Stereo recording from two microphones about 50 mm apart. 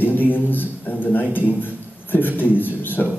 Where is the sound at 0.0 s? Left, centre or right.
Left.